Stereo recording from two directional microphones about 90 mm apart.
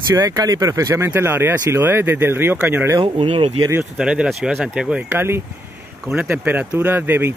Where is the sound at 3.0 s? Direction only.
80° right.